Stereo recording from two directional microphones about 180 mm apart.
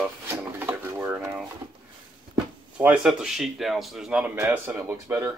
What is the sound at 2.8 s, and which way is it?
Speech, 5° right (ahead or behind).